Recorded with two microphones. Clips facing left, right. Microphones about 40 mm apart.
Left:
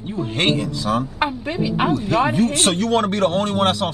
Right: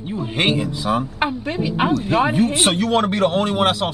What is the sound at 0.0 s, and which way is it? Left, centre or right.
Speech, centre.